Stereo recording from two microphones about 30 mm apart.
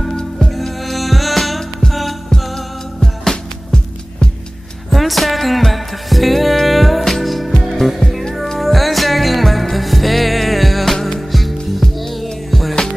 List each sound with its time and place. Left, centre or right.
0.1 s music: left
0.6 s music: centre
3.0 s music: centre
4.9 s music: centre
8.5 s music: centre